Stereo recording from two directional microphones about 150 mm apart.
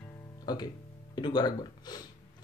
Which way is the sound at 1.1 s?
30° left (ahead or behind).